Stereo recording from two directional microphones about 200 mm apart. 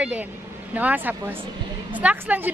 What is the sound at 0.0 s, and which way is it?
A woman's voice, 10° right (ahead or behind).